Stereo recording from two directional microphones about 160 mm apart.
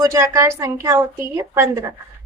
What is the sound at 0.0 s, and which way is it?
A woman's voice, 20° right (ahead or behind).